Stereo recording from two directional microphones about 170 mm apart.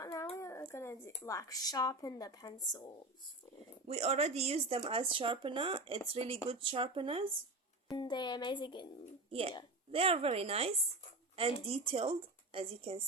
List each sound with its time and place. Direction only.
0.0 s a sound: 20° left (ahead or behind)
0.3 s speech: 15° left (ahead or behind)
3.8 s speech: 40° right (ahead or behind)
7.9 s speech: 25° left (ahead or behind)
9.3 s speech: 35° right (ahead or behind)